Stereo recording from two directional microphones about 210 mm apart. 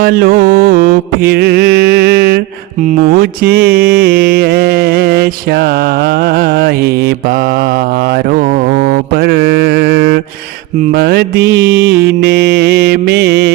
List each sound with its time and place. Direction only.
0.0 s mantra: 45° right (ahead or behind)